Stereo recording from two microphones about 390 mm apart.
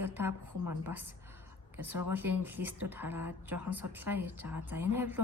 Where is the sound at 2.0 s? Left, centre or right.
Centre.